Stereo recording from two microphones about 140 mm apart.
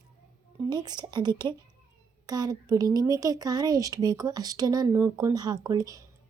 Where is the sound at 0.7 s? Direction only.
30° right (ahead or behind).